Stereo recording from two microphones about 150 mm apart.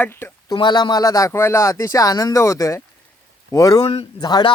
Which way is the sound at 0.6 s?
30° left (ahead or behind).